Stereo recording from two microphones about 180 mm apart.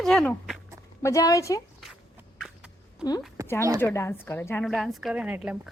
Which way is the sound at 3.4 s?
20° right (ahead or behind).